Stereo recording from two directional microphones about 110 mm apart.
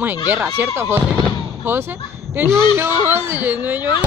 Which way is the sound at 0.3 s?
20° right (ahead or behind).